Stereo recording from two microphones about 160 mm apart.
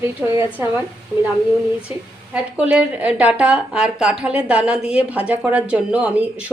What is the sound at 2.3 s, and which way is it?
A woman's voice, 5° right (ahead or behind).